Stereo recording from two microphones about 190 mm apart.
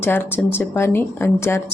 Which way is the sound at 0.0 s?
10° left (ahead or behind).